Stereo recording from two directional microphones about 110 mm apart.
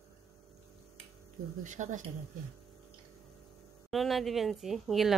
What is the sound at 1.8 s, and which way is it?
Speech, 90° right.